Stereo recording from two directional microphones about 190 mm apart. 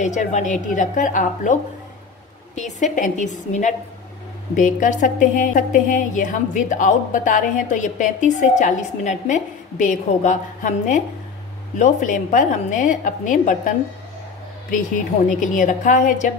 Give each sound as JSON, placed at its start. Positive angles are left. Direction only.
{"t": 0.0, "sound": "a woman's voice", "side_deg": 40}
{"t": 15.2, "sound": "a woman's voice", "side_deg": 40}